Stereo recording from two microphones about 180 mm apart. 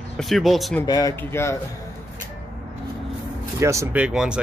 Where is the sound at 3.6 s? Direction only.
15° right (ahead or behind).